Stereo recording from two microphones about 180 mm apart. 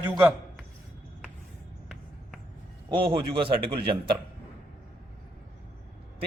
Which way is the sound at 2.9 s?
30° right (ahead or behind).